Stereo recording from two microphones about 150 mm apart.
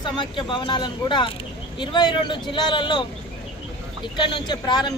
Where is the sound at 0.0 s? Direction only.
30° left (ahead or behind).